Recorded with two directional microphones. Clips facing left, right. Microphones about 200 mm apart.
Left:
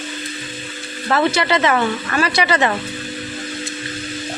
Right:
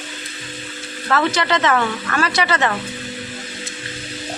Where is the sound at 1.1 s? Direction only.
10° left (ahead or behind).